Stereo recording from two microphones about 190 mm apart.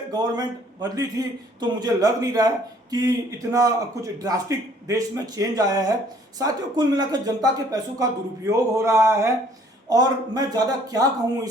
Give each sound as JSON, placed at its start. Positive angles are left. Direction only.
{"t": 0.1, "sound": "a man's voice", "side_deg": -20}
{"t": 8.4, "sound": "a sound", "side_deg": -15}
{"t": 9.9, "sound": "a man's voice", "side_deg": -20}